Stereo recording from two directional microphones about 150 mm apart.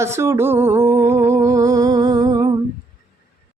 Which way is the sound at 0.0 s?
20° right (ahead or behind).